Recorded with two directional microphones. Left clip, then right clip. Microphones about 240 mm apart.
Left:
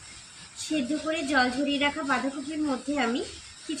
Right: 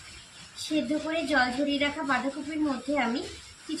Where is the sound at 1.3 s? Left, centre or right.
Centre.